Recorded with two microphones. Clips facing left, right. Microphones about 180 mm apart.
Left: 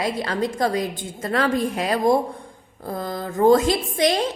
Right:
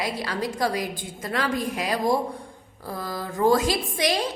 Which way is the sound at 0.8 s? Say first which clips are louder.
Left 4 dB; 25° left (ahead or behind).